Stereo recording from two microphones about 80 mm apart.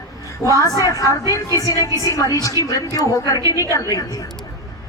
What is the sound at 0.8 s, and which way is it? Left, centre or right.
A woman's voice, left.